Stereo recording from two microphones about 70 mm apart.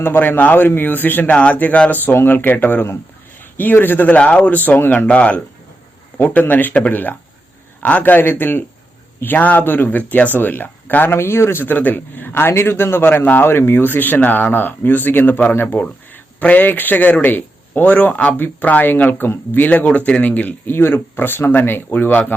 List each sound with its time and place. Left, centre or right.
0.0 s speech: left